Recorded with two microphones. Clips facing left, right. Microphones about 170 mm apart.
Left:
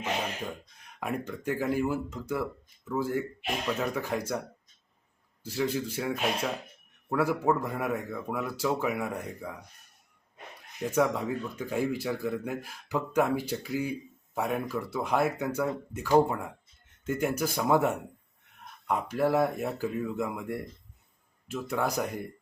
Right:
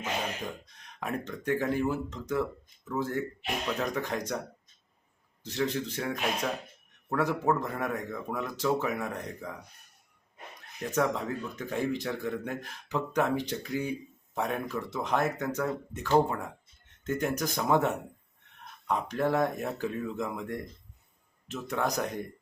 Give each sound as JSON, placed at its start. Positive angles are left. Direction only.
{"t": 0.9, "sound": "speech", "side_deg": 10}
{"t": 5.4, "sound": "speech", "side_deg": 10}
{"t": 10.9, "sound": "speech", "side_deg": 10}